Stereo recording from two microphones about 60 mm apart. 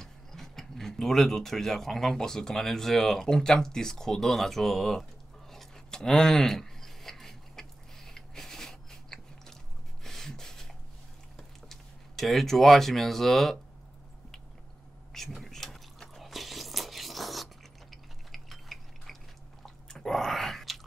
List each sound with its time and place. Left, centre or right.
0.0 s speech: centre
5.5 s a sound: centre
10.0 s beatboxing: centre
11.3 s a sound: centre
15.1 s biting: centre
18.3 s mechanisms: centre
19.6 s drip: centre